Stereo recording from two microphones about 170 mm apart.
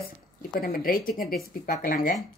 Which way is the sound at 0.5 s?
60° left (ahead or behind).